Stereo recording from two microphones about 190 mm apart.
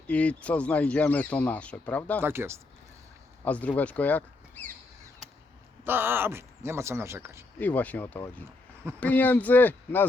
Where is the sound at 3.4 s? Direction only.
10° left (ahead or behind).